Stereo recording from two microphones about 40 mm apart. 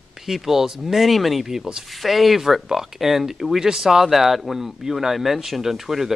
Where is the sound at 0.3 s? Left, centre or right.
Centre.